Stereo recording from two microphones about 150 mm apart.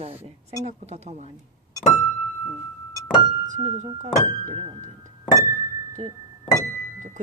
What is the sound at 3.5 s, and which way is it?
Speech, 50° right (ahead or behind).